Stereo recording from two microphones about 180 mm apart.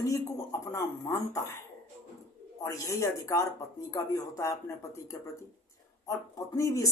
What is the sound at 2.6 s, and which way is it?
Speech, 15° left (ahead or behind).